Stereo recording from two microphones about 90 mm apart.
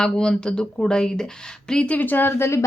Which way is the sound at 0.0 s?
10° left (ahead or behind).